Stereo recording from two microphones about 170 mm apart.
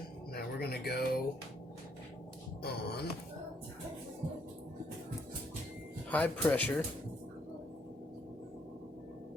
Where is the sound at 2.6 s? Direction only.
70° left (ahead or behind).